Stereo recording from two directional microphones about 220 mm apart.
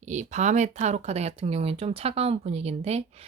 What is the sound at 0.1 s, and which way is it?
Speech, 35° right (ahead or behind).